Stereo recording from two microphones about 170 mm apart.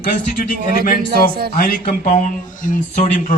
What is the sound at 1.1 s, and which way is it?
Speech, 65° right (ahead or behind).